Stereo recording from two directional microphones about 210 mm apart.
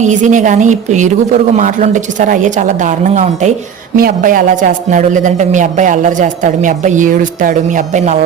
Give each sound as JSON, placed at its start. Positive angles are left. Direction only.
{"t": 0.0, "sound": "a man's voice", "side_deg": -35}